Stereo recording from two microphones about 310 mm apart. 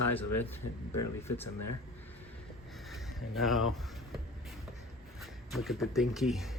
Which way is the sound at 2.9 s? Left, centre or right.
Centre.